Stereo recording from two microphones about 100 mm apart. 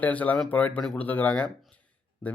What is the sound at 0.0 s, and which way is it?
Speech, 15° left (ahead or behind).